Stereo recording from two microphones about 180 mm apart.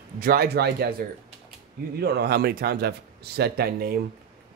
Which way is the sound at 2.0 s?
65° right (ahead or behind).